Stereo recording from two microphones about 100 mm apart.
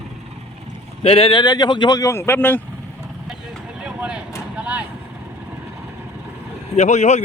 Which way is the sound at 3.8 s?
10° right (ahead or behind).